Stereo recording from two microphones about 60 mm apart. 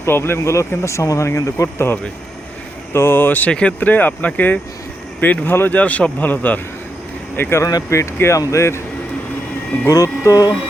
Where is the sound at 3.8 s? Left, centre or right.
Left.